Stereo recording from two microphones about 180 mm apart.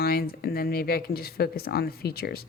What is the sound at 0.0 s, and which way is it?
Speech, 55° left (ahead or behind).